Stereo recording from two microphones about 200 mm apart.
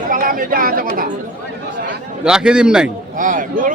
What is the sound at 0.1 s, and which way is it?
Speech, 45° right (ahead or behind).